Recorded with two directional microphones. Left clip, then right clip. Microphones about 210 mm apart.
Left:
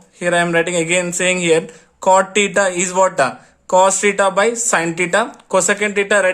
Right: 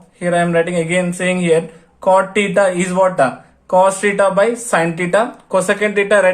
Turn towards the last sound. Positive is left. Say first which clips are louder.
# right 2 dB
turn(degrees=25)  # may be behind; listen again after turning